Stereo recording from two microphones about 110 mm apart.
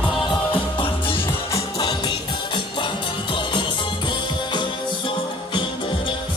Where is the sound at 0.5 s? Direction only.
50° left (ahead or behind).